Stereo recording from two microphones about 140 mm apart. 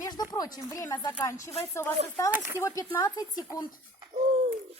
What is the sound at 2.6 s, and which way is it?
Speech, 20° left (ahead or behind).